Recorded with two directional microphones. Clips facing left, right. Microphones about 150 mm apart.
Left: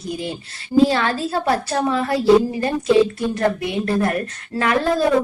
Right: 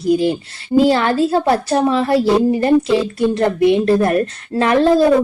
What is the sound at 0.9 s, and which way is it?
A woman's voice, 25° right (ahead or behind).